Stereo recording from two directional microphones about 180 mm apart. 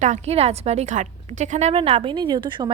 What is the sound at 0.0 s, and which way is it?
A woman's voice, 40° right (ahead or behind).